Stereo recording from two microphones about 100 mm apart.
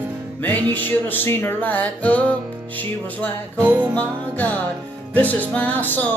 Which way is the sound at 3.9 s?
15° left (ahead or behind).